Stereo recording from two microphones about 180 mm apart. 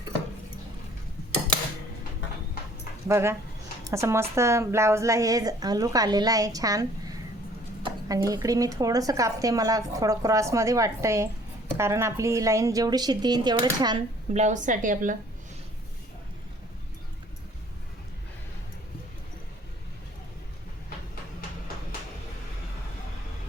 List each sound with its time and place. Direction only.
3.1 s speech: 15° right (ahead or behind)
14.3 s a woman's voice: 40° right (ahead or behind)